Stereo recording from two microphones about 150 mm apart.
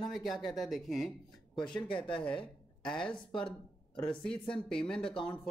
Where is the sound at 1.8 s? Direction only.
35° left (ahead or behind).